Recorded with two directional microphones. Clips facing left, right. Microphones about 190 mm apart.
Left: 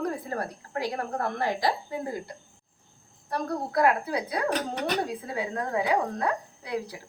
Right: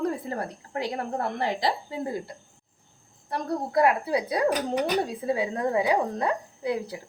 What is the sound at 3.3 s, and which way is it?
Speech, 20° right (ahead or behind).